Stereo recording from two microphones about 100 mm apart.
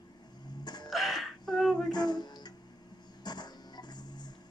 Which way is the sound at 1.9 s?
45° left (ahead or behind).